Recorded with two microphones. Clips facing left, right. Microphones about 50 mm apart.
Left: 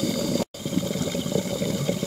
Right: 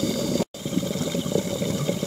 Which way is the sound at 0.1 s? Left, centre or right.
Right.